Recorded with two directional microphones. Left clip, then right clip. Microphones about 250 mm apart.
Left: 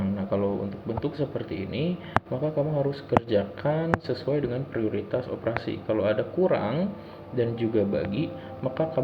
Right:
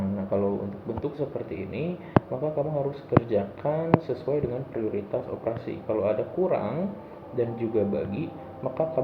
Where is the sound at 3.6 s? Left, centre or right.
Left.